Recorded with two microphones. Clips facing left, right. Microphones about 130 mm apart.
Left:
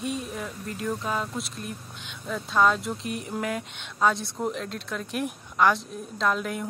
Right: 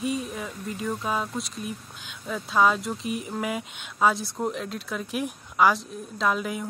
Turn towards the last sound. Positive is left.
turn(degrees=0)  # may be behind; listen again after turning